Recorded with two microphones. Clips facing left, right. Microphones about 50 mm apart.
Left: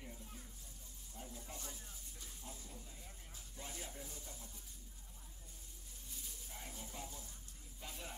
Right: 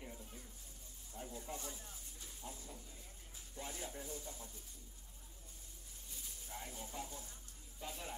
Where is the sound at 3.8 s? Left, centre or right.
Centre.